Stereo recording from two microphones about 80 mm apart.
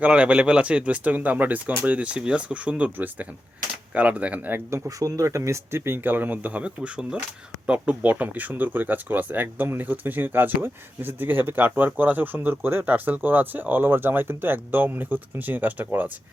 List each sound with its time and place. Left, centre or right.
0.0 s speech: centre
4.9 s speech: right